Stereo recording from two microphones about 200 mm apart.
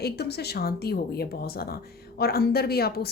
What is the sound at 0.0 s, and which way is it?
A woman's voice, 55° left (ahead or behind).